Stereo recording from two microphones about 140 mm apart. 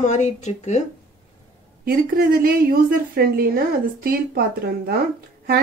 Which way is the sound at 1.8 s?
90° right.